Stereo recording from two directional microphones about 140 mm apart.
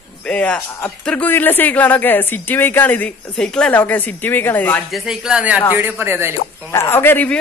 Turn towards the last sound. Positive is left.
turn(degrees=15)  # may be behind; listen again after turning